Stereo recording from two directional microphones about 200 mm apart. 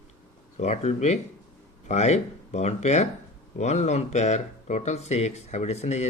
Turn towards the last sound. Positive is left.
turn(degrees=35)  # may be behind; listen again after turning